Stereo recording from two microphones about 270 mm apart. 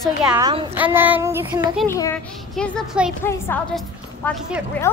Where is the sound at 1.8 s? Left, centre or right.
Centre.